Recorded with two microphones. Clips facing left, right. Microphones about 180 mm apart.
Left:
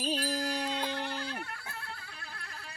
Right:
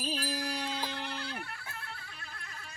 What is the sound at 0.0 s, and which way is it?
Music, 35° left (ahead or behind).